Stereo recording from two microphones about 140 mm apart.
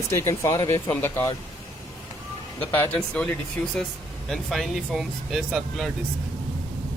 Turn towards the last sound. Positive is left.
turn(degrees=0)  # may be behind; listen again after turning